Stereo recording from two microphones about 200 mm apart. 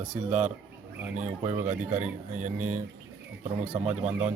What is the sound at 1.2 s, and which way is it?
Speech, 35° right (ahead or behind).